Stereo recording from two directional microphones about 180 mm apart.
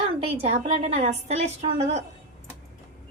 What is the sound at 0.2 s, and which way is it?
A woman's voice, 35° right (ahead or behind).